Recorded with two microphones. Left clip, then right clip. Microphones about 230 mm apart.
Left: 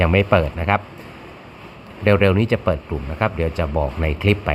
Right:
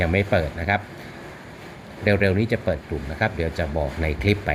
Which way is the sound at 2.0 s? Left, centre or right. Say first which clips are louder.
Left 4 dB; left.